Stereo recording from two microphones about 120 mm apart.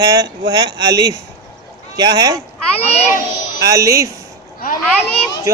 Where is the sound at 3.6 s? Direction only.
25° right (ahead or behind).